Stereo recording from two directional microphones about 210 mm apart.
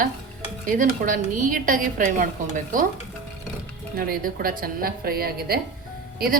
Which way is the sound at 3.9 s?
45° right (ahead or behind).